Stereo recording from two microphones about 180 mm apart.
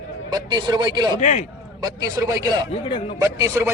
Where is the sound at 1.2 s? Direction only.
40° left (ahead or behind).